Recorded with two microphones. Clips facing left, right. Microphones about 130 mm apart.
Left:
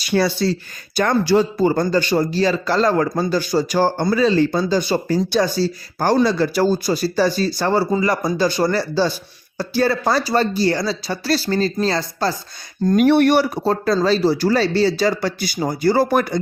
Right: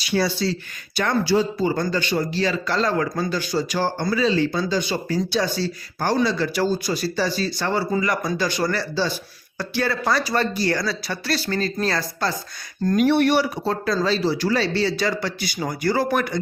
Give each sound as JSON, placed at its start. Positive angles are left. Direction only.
{"t": 0.0, "sound": "speech", "side_deg": 50}
{"t": 13.0, "sound": "speech", "side_deg": 55}